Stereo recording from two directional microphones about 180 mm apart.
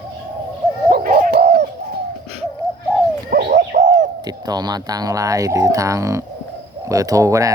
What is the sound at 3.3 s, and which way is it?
Bird, 55° right (ahead or behind).